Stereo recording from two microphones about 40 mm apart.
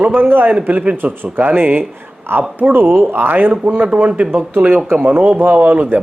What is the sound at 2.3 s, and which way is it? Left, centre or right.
Speech, right.